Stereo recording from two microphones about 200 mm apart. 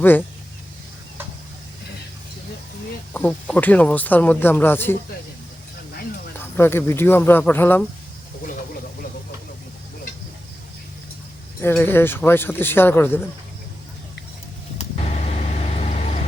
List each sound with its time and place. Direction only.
0.0 s speech: 10° left (ahead or behind)
3.1 s speech: 5° left (ahead or behind)
6.4 s speech: 10° left (ahead or behind)
11.6 s speech: 10° left (ahead or behind)
14.8 s vehicle: 35° left (ahead or behind)